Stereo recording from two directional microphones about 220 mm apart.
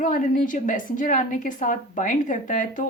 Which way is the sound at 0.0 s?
35° left (ahead or behind).